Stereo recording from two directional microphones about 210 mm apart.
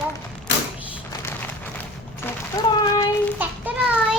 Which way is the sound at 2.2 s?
15° left (ahead or behind).